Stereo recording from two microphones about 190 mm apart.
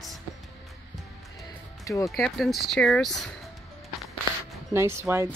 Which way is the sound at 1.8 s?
15° left (ahead or behind).